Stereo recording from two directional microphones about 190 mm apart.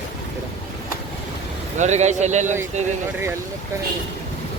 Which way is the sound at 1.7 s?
35° right (ahead or behind).